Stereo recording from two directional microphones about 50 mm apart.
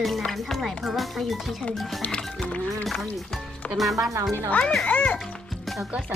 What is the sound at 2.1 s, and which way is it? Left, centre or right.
Speech, centre.